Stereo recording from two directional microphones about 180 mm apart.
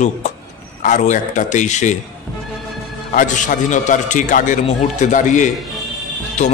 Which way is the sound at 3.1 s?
45° left (ahead or behind).